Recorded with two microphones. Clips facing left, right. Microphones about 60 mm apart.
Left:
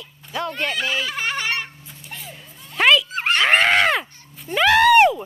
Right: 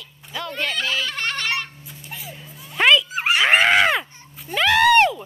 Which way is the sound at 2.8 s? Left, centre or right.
Centre.